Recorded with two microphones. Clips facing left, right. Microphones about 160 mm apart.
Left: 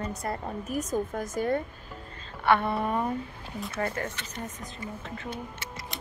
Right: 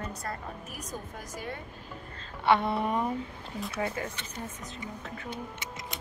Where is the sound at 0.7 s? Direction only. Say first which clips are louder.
Left 11 dB; 50° left (ahead or behind).